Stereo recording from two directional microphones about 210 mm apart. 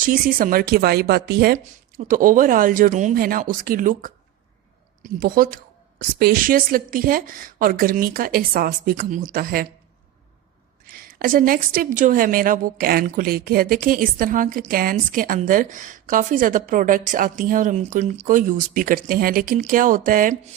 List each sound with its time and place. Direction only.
0.0 s a woman's voice: 40° right (ahead or behind)
10.8 s a woman's voice: 45° right (ahead or behind)